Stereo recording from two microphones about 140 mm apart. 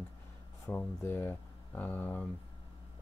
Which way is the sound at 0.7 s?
15° left (ahead or behind).